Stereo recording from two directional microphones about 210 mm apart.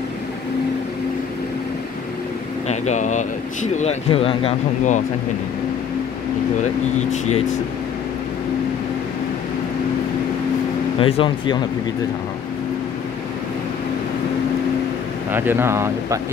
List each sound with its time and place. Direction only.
2.7 s speech: 35° left (ahead or behind)
7.0 s speech: 35° left (ahead or behind)
11.0 s speech: 25° left (ahead or behind)
15.3 s speech: 10° right (ahead or behind)